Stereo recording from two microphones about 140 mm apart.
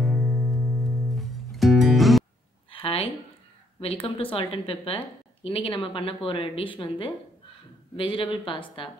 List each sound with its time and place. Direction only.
0.0 s music: centre (ahead or behind)
2.7 s a sound: 40° left (ahead or behind)
3.8 s a woman's voice: 40° left (ahead or behind)